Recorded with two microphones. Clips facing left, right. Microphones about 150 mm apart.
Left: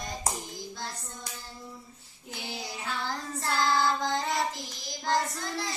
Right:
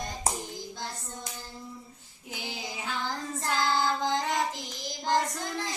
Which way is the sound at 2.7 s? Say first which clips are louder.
Right 1 dB; 15° right (ahead or behind).